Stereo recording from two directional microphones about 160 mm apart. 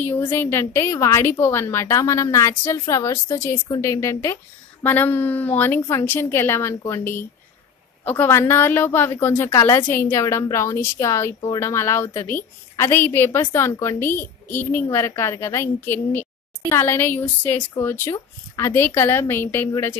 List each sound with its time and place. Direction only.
0.0 s a woman's voice: 15° left (ahead or behind)